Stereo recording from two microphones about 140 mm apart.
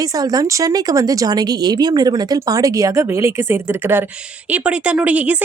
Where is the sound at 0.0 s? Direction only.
25° right (ahead or behind).